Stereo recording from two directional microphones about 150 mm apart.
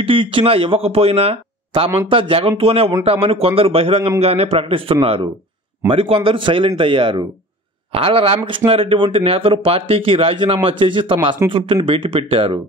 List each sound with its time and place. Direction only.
0.0 s speech: 35° right (ahead or behind)